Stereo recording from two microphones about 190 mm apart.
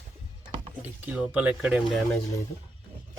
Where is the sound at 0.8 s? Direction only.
10° right (ahead or behind).